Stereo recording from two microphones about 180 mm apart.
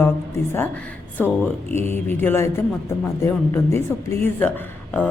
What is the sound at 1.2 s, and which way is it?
Speech, 10° left (ahead or behind).